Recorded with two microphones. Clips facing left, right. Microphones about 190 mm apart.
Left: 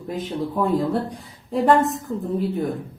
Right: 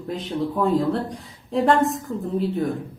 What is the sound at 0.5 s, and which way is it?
Speech, 10° left (ahead or behind).